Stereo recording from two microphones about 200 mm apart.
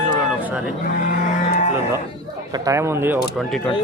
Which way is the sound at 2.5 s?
15° right (ahead or behind).